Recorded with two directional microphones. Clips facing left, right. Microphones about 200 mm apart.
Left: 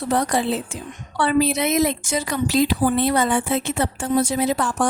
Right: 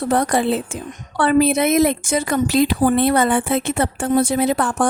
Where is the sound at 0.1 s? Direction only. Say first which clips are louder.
Right 3 dB; 55° right (ahead or behind).